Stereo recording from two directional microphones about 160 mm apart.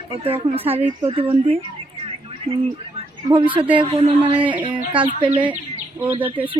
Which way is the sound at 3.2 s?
30° right (ahead or behind).